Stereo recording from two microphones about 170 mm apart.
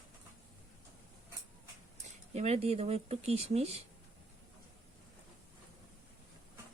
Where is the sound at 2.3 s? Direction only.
40° right (ahead or behind).